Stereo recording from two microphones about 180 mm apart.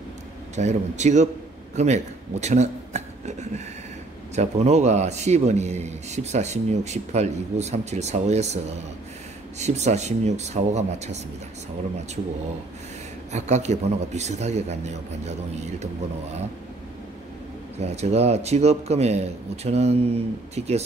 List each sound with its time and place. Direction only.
0.6 s a man's voice: 40° right (ahead or behind)
13.3 s speech: 40° right (ahead or behind)
17.7 s speech: 35° right (ahead or behind)